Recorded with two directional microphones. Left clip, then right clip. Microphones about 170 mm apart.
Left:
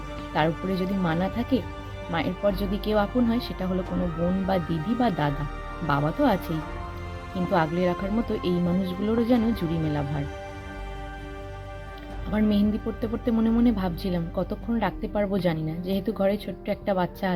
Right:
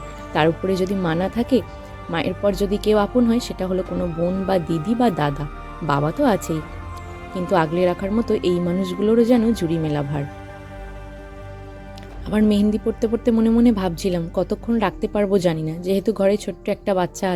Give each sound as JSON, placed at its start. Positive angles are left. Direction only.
{"t": 0.3, "sound": "speech", "side_deg": -40}
{"t": 12.3, "sound": "speech", "side_deg": -40}